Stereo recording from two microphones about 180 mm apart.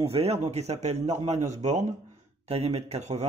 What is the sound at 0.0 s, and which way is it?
Speech, 35° right (ahead or behind).